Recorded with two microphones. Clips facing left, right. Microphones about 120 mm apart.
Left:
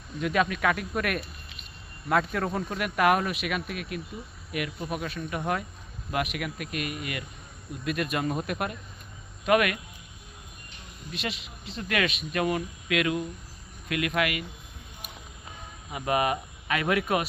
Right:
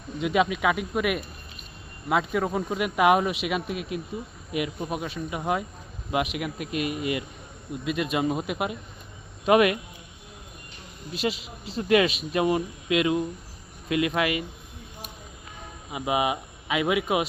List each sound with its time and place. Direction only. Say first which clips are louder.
0.2 s speech: right 2 dB; 15° right (ahead or behind)
9.5 s speech: right 4 dB; 25° right (ahead or behind)
11.1 s speech: right 7 dB; 30° right (ahead or behind)
15.9 s speech: right 1 dB; 15° right (ahead or behind)